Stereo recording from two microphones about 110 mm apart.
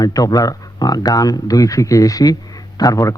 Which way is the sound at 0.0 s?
35° left (ahead or behind).